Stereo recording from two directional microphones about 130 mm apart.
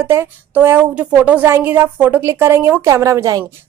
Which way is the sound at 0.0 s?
15° right (ahead or behind).